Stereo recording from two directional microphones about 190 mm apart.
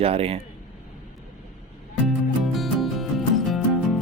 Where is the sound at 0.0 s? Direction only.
30° right (ahead or behind).